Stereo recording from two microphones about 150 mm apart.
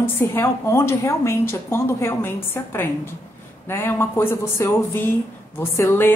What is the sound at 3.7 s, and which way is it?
Speech, 15° left (ahead or behind).